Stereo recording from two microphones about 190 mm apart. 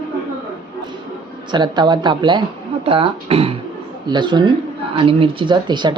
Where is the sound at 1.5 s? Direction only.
25° right (ahead or behind).